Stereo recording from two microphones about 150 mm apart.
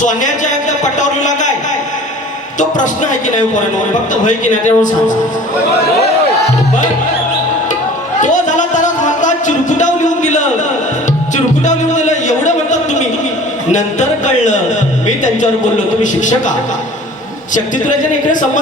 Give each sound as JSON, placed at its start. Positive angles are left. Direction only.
{"t": 0.0, "sound": "a man's voice", "side_deg": 55}
{"t": 2.6, "sound": "speech", "side_deg": 55}
{"t": 8.2, "sound": "music", "side_deg": 55}
{"t": 11.6, "sound": "music", "side_deg": 55}
{"t": 13.7, "sound": "a sound", "side_deg": 55}
{"t": 15.0, "sound": "music", "side_deg": 55}
{"t": 17.5, "sound": "speech", "side_deg": 60}